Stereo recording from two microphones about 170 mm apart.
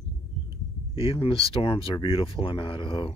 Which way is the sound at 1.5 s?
35° left (ahead or behind).